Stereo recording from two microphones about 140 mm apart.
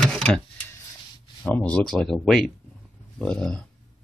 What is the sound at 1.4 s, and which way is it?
Speech, 10° left (ahead or behind).